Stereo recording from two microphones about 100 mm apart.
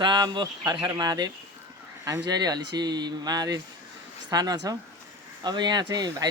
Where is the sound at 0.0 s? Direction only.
50° right (ahead or behind).